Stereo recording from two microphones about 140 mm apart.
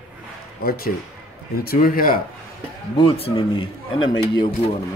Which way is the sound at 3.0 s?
45° left (ahead or behind).